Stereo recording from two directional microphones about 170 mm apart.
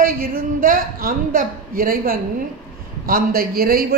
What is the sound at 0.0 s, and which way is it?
A woman's voice, 55° right (ahead or behind).